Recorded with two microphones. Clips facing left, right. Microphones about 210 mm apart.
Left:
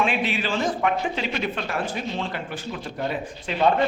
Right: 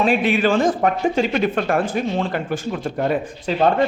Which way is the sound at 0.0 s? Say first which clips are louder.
Right 7 dB; 50° right (ahead or behind).